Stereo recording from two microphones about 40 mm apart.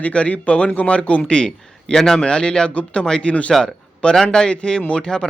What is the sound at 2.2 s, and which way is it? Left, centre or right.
Speech, left.